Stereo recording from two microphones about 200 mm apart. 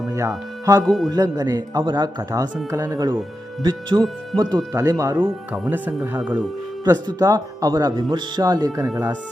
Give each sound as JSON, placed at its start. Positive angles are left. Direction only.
{"t": 0.1, "sound": "speech", "side_deg": -15}
{"t": 0.9, "sound": "a man's voice", "side_deg": 0}
{"t": 1.1, "sound": "speech", "side_deg": -20}